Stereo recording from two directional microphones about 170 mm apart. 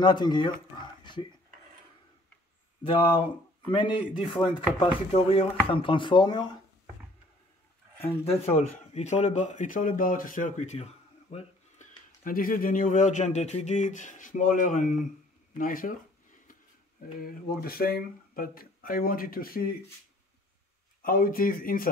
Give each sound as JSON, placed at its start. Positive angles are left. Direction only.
{"t": 0.0, "sound": "speech", "side_deg": 25}
{"t": 2.8, "sound": "speech", "side_deg": 30}
{"t": 8.3, "sound": "speech", "side_deg": 40}
{"t": 15.5, "sound": "a sound", "side_deg": 55}
{"t": 17.2, "sound": "speech", "side_deg": 60}
{"t": 21.0, "sound": "speech", "side_deg": 55}